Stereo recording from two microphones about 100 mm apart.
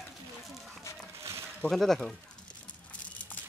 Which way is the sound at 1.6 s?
5° left (ahead or behind).